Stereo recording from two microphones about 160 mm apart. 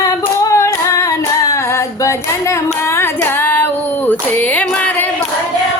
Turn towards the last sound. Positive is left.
turn(degrees=10)  # may be behind; listen again after turning